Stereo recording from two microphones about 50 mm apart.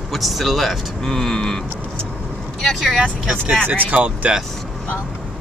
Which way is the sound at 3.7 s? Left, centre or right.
Right.